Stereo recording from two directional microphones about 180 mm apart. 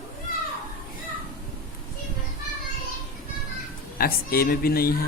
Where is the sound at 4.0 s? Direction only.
55° left (ahead or behind).